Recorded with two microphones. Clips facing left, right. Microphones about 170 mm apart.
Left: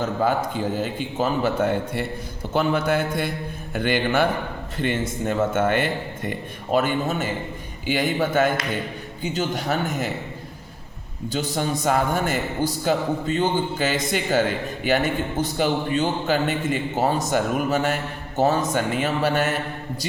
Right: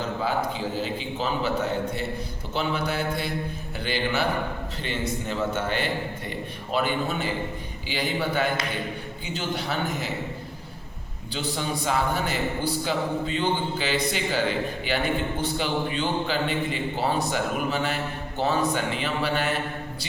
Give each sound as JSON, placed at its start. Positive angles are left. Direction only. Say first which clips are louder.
{"t": 0.0, "sound": "a man's voice", "louder": "left 4 dB", "side_deg": 50}
{"t": 11.3, "sound": "a man's voice", "louder": "left 4 dB", "side_deg": 45}